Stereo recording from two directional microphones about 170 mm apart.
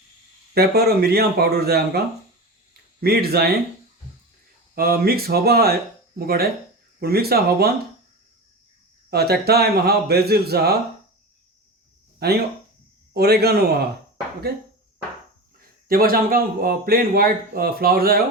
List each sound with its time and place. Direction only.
0.5 s speech: 65° right (ahead or behind)
3.0 s speech: 65° right (ahead or behind)
4.7 s speech: 60° right (ahead or behind)
9.0 s speech: 70° right (ahead or behind)
12.2 s speech: 70° right (ahead or behind)
15.9 s speech: 60° right (ahead or behind)